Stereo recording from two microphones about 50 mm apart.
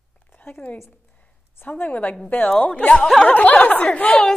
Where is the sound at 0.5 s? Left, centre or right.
Left.